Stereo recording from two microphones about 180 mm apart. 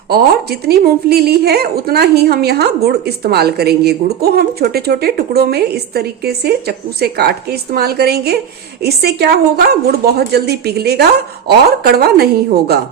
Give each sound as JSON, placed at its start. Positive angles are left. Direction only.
{"t": 0.1, "sound": "a woman's voice", "side_deg": -60}